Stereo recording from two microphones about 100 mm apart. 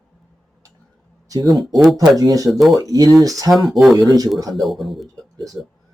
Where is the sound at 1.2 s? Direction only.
40° right (ahead or behind).